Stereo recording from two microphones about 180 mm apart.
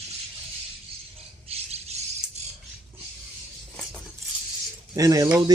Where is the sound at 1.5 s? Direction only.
35° right (ahead or behind).